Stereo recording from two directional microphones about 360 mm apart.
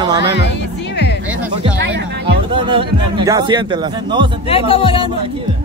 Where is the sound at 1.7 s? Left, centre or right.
Right.